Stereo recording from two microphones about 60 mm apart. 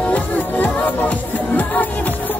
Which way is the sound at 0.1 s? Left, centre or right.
Left.